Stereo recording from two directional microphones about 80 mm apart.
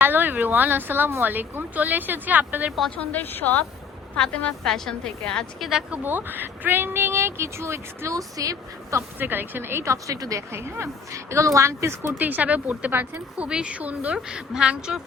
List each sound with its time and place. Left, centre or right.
0.0 s speech: right
3.0 s a woman's voice: left
4.2 s a woman's voice: centre
5.9 s speech: right
9.1 s speech: right
12.1 s speech: right
13.5 s a woman's voice: centre